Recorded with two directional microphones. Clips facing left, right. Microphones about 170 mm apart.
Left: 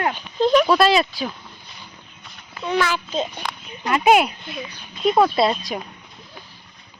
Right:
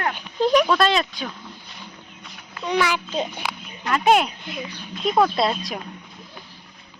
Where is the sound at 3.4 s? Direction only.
5° right (ahead or behind).